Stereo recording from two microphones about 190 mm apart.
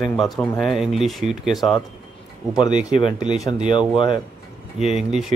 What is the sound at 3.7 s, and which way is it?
Speech, 25° left (ahead or behind).